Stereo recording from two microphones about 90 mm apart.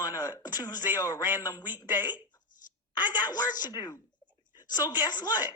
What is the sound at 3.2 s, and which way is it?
A woman's voice, 45° left (ahead or behind).